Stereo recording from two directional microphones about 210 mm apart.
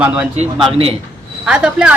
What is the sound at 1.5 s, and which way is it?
Speech, 5° right (ahead or behind).